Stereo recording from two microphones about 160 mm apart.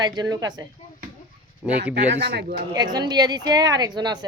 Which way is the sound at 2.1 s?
90° right.